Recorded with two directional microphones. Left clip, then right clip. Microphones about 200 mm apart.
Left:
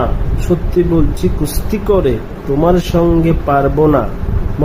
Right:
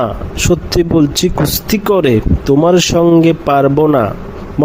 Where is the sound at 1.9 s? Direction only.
40° right (ahead or behind).